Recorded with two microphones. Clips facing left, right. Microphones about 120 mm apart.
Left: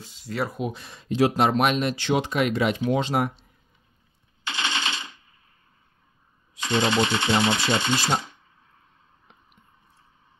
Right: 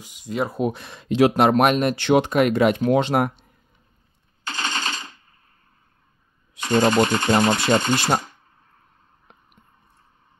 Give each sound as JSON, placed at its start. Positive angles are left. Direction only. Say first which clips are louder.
{"t": 0.0, "sound": "speech", "louder": "right 3 dB", "side_deg": -15}
{"t": 0.6, "sound": "speech", "louder": "right 6 dB", "side_deg": -55}
{"t": 4.5, "sound": "machine gun", "louder": "right 1 dB", "side_deg": -40}
{"t": 6.6, "sound": "speech", "louder": "right 5 dB", "side_deg": -45}